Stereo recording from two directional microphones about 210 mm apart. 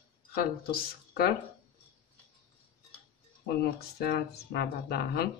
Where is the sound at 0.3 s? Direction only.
50° left (ahead or behind).